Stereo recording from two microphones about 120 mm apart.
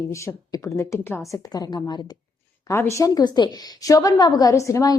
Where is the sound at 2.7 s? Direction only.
25° left (ahead or behind).